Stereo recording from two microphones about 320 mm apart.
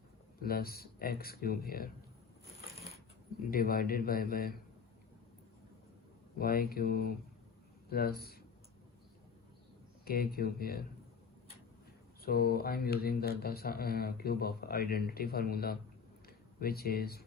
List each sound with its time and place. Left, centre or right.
0.4 s speech: left
3.4 s speech: left
6.4 s speech: left
10.1 s speech: left
12.2 s speech: left